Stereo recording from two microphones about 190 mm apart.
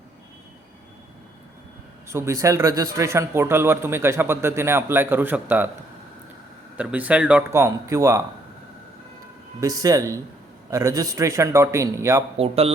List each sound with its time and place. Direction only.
2.0 s a man's voice: 15° right (ahead or behind)
6.7 s a man's voice: 5° right (ahead or behind)
9.6 s a man's voice: 20° right (ahead or behind)
12.4 s speech: 30° right (ahead or behind)